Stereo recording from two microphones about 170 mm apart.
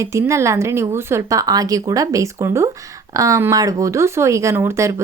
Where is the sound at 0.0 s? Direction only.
15° right (ahead or behind).